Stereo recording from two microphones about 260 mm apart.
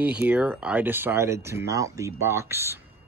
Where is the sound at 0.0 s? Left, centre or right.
Centre.